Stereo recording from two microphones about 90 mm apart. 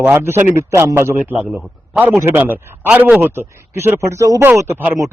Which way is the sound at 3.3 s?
30° right (ahead or behind).